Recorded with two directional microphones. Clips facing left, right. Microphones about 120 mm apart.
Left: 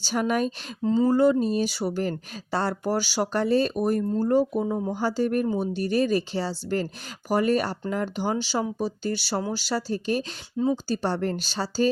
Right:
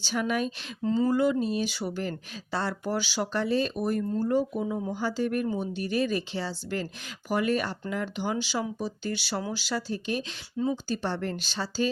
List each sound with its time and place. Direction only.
0.0 s speech: 40° left (ahead or behind)
0.8 s speech: 25° left (ahead or behind)